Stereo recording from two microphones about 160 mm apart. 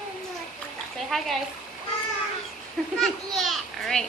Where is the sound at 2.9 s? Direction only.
Centre (ahead or behind).